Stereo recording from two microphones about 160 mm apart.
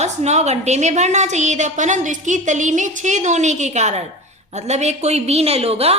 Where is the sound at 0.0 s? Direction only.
45° right (ahead or behind).